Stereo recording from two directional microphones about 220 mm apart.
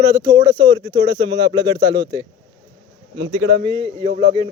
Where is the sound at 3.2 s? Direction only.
80° right.